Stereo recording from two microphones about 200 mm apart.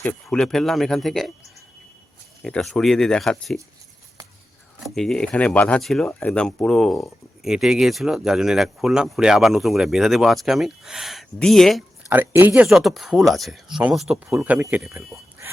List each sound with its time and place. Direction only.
0.0 s speech: 5° left (ahead or behind)
2.4 s speech: centre (ahead or behind)
4.8 s speech: centre (ahead or behind)
12.0 s speech: 10° right (ahead or behind)
12.6 s speech: centre (ahead or behind)